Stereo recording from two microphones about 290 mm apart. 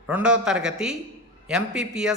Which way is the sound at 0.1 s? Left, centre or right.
Centre.